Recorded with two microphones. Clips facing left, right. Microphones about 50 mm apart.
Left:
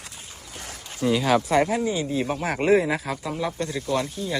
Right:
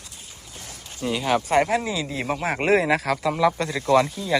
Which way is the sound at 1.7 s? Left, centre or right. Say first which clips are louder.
Even; right.